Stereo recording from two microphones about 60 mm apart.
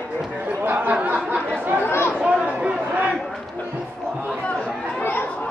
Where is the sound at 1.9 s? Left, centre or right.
Left.